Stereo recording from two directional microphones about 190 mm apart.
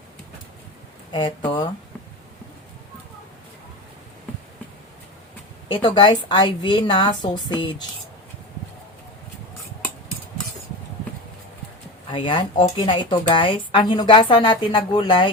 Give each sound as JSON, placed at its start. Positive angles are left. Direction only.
{"t": 1.1, "sound": "a woman's voice", "side_deg": 20}
{"t": 5.6, "sound": "a woman's voice", "side_deg": 25}
{"t": 12.1, "sound": "a woman's voice", "side_deg": 25}